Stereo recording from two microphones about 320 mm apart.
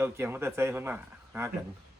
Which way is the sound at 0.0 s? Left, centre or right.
Centre.